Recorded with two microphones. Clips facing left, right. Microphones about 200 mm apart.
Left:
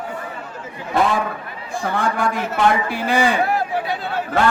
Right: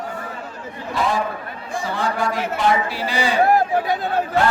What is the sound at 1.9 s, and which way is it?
A man's voice, 55° left (ahead or behind).